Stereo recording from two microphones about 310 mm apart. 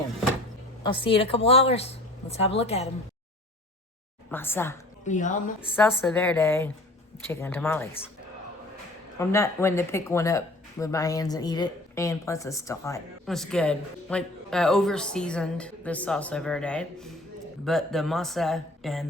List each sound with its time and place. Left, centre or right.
0.8 s a woman's voice: centre
4.3 s speech: centre
5.0 s a woman's voice: left
5.5 s speech: centre
9.1 s speech: centre